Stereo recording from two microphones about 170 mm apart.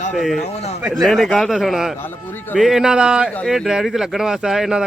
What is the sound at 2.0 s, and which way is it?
Speech, 10° left (ahead or behind).